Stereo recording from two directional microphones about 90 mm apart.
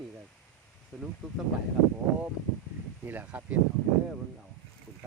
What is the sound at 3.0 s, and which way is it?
Speech, 20° right (ahead or behind).